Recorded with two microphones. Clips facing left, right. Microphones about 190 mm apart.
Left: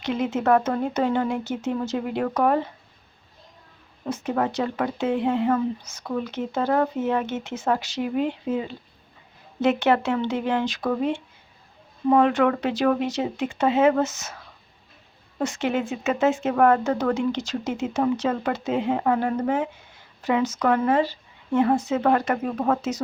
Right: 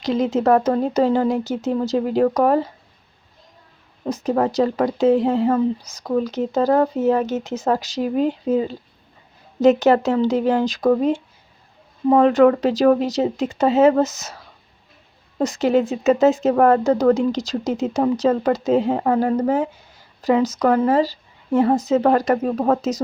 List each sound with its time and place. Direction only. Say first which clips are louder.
0.0 s speech: right 5 dB; 35° right (ahead or behind)
4.0 s speech: right 5 dB; 35° right (ahead or behind)
15.4 s speech: right 7 dB; 40° right (ahead or behind)